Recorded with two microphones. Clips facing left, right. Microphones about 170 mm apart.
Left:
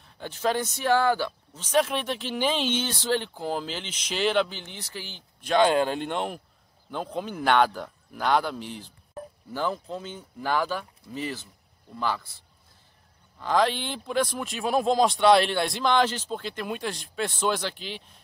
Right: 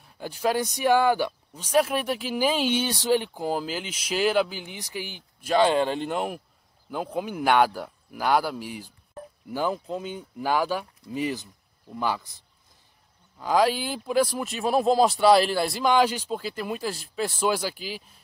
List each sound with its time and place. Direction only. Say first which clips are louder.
0.0 s speech: right 1 dB; 10° right (ahead or behind)
13.4 s speech: right 2 dB; 10° right (ahead or behind)